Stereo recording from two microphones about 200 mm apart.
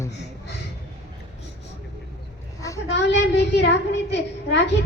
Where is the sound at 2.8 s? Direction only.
60° left (ahead or behind).